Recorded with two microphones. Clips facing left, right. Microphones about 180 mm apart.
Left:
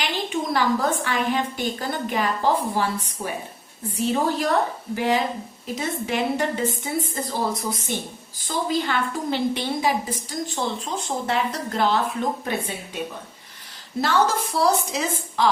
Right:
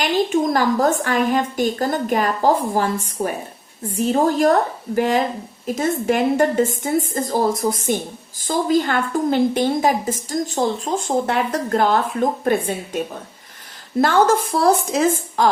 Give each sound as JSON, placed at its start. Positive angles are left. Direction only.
{"t": 0.0, "sound": "a woman's voice", "side_deg": -45}
{"t": 14.0, "sound": "a woman's voice", "side_deg": -50}